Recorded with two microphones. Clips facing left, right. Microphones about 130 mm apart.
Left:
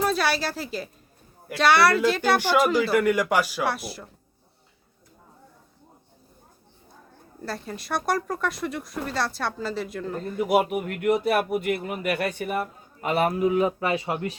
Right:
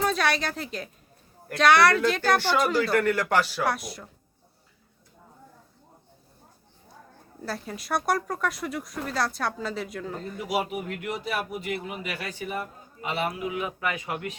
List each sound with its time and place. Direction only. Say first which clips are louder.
0.0 s speech: left 1 dB; 5° left (ahead or behind)
7.4 s speech: left 1 dB; centre (ahead or behind)
10.4 s speech: left 7 dB; 55° left (ahead or behind); by 14.3 s 30° left (ahead or behind)